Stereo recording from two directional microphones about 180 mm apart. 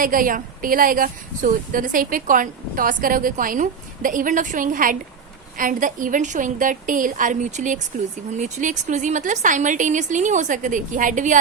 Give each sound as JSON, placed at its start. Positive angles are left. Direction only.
{"t": 0.0, "sound": "a woman's voice", "side_deg": -50}